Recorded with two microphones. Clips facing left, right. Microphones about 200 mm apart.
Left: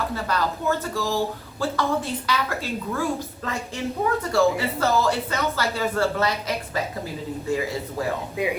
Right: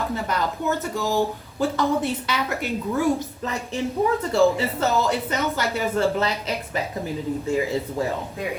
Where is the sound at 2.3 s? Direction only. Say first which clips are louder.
Right 1 dB; 20° right (ahead or behind).